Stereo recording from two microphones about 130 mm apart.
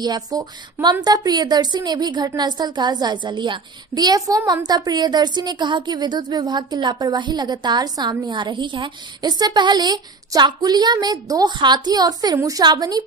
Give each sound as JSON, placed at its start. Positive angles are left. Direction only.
{"t": 0.0, "sound": "a woman's voice", "side_deg": -30}